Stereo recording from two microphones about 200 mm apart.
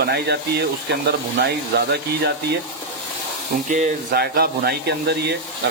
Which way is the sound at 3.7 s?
50° right (ahead or behind).